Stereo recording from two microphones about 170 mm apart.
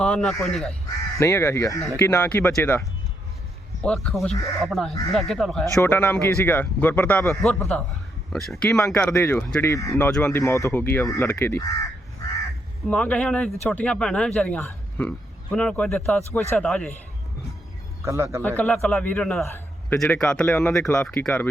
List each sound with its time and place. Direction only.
0.0 s speech: 5° left (ahead or behind)
1.2 s speech: 15° left (ahead or behind)
3.8 s speech: 5° left (ahead or behind)
5.7 s speech: 15° left (ahead or behind)
12.9 s speech: 10° left (ahead or behind)
18.0 s a man's voice: 15° right (ahead or behind)
18.4 s speech: 10° left (ahead or behind)
19.9 s speech: 5° left (ahead or behind)